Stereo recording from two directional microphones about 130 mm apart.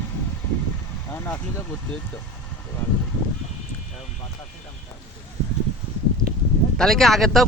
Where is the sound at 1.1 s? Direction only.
15° left (ahead or behind).